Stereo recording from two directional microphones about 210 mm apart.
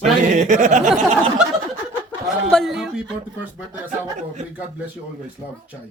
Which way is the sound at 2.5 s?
Centre (ahead or behind).